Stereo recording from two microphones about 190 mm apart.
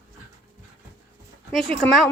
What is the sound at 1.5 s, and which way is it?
Speech, centre (ahead or behind).